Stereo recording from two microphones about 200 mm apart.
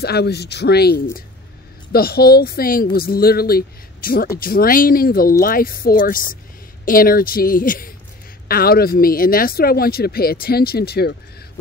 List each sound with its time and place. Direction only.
0.0 s speech: 55° left (ahead or behind)